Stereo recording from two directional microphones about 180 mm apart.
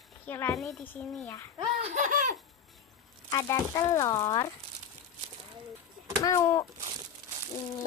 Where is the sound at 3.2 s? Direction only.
20° left (ahead or behind).